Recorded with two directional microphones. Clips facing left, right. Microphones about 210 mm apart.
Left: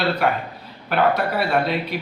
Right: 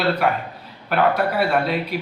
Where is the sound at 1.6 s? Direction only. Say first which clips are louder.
Right 1 dB; 5° right (ahead or behind).